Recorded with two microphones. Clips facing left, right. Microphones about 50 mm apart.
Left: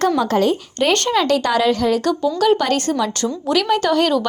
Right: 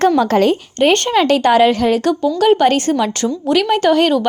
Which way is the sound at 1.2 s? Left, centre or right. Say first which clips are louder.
Right 5 dB; right.